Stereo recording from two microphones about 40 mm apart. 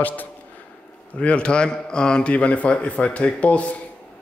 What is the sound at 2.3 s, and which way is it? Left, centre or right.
Speech, left.